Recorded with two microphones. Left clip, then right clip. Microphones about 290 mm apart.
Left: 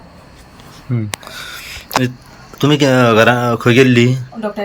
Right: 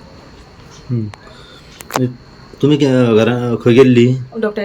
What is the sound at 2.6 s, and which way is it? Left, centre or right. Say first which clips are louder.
Speech: left 1 dB; centre.